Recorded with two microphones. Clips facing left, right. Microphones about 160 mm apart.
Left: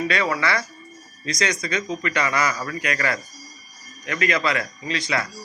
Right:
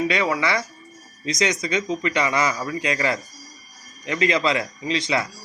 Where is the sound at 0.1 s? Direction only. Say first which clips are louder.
Right 1 dB; 20° right (ahead or behind).